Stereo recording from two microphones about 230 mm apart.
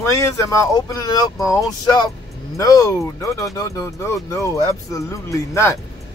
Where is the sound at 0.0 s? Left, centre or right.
Centre.